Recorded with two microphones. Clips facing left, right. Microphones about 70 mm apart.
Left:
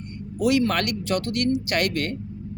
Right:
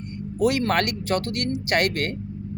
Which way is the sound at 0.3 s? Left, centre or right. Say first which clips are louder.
Even; right.